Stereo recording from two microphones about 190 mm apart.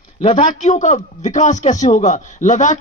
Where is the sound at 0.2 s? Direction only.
40° left (ahead or behind).